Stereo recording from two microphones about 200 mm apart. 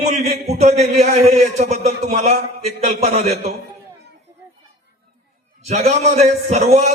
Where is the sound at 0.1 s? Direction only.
35° right (ahead or behind).